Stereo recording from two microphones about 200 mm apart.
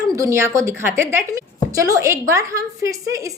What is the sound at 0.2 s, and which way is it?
A woman's voice, 15° right (ahead or behind).